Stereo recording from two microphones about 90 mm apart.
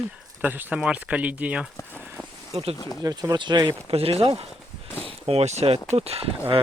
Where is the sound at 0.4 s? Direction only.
20° right (ahead or behind).